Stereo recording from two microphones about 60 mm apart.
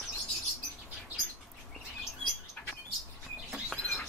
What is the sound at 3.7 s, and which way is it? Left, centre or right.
Bird, centre.